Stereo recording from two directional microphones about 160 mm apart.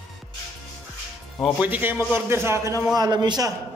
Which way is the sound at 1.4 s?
10° right (ahead or behind).